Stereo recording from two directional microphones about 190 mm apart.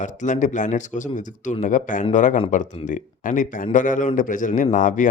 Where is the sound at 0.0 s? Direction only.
40° left (ahead or behind).